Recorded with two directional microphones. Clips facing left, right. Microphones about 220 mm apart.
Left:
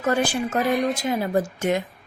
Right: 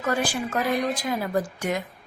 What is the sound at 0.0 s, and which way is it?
A woman's voice, 25° left (ahead or behind).